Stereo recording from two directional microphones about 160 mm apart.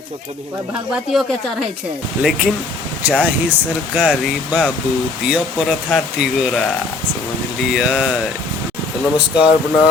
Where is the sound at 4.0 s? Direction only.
5° right (ahead or behind).